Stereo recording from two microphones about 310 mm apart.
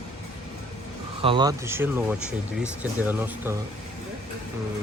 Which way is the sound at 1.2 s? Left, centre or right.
Centre.